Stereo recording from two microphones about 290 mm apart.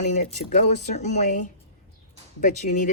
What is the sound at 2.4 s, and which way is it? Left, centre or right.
Speech, left.